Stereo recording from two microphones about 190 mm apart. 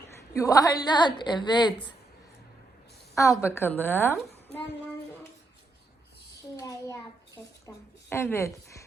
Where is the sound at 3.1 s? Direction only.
15° left (ahead or behind).